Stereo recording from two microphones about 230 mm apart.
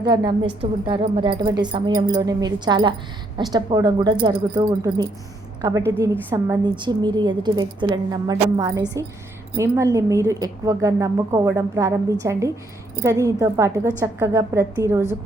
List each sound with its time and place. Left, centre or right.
0.0 s a woman's voice: centre